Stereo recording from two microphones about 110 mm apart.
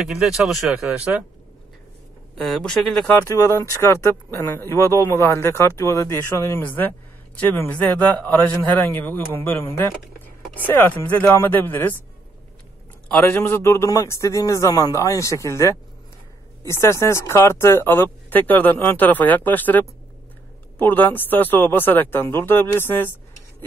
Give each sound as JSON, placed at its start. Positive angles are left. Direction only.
{"t": 0.1, "sound": "speech", "side_deg": -5}
{"t": 2.3, "sound": "speech", "side_deg": 0}
{"t": 3.3, "sound": "speech", "side_deg": 25}
{"t": 13.1, "sound": "speech", "side_deg": 20}